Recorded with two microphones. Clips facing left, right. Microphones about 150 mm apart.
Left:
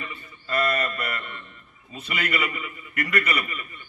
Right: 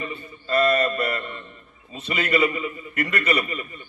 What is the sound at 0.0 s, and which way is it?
A man's voice, 30° right (ahead or behind).